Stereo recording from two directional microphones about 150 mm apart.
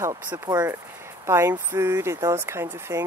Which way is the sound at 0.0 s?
25° right (ahead or behind).